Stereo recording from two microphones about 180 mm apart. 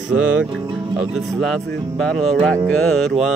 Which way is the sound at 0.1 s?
5° right (ahead or behind).